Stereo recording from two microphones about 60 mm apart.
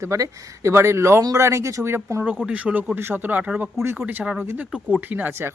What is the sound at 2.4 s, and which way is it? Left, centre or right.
Speech, right.